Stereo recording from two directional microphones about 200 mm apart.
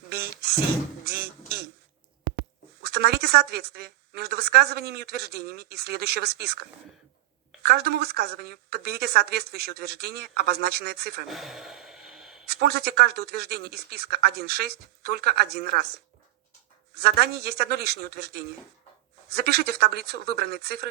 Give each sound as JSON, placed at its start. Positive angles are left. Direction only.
{"t": 0.1, "sound": "a sound", "side_deg": -50}
{"t": 1.0, "sound": "beatboxing", "side_deg": -50}
{"t": 2.8, "sound": "a woman's voice", "side_deg": -50}
{"t": 11.3, "sound": "sigh", "side_deg": 0}
{"t": 12.5, "sound": "a woman's voice", "side_deg": -50}